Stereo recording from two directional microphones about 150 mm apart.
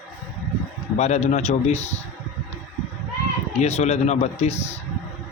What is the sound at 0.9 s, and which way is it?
Speech, 50° left (ahead or behind).